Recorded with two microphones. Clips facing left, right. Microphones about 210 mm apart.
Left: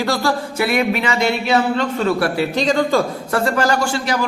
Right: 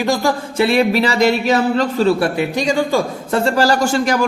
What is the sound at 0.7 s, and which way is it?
A man's voice, 35° right (ahead or behind).